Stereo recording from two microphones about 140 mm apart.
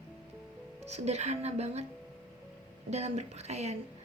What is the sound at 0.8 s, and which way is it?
Speech, 50° right (ahead or behind).